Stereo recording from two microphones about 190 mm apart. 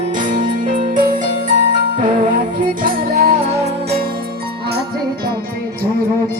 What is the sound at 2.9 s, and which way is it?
Music, 55° right (ahead or behind).